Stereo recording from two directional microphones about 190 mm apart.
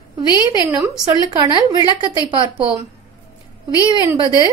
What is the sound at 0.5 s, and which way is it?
A woman's voice, 20° right (ahead or behind).